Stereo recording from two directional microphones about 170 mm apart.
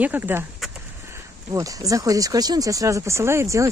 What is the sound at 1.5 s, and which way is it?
Speech, 20° right (ahead or behind).